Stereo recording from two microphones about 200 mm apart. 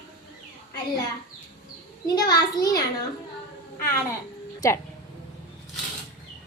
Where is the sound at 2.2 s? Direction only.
20° left (ahead or behind).